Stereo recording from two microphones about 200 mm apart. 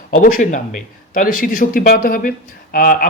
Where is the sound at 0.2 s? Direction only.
40° left (ahead or behind).